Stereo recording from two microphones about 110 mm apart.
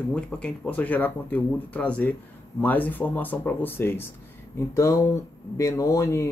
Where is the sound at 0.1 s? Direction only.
10° left (ahead or behind).